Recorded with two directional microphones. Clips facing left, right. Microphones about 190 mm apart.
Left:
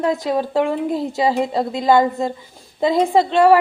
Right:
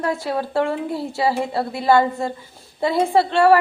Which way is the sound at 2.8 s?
15° left (ahead or behind).